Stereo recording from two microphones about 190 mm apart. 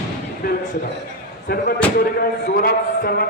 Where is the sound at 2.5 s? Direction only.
50° left (ahead or behind).